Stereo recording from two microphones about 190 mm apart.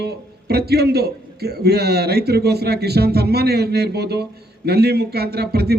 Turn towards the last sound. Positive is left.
turn(degrees=-55)  # may be behind; listen again after turning